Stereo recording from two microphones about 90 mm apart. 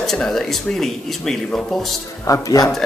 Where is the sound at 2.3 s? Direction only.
45° left (ahead or behind).